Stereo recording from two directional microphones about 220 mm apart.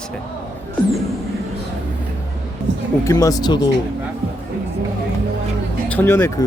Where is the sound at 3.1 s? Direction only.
15° left (ahead or behind).